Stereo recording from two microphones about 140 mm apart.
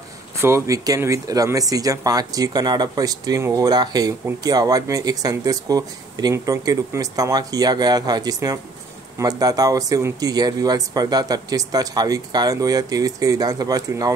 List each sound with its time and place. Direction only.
0.4 s speech: 20° right (ahead or behind)